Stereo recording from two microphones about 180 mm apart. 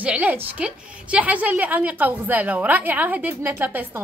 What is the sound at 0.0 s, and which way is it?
A woman's voice, 10° right (ahead or behind).